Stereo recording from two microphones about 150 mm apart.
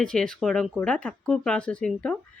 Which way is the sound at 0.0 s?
5° left (ahead or behind).